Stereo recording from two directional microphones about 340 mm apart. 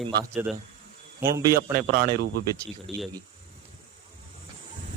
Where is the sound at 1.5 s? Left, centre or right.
Right.